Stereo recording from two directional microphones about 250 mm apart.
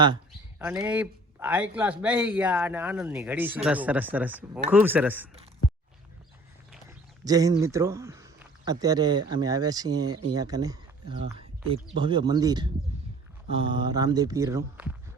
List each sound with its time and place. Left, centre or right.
0.6 s a man's voice: centre
6.8 s a man's voice: centre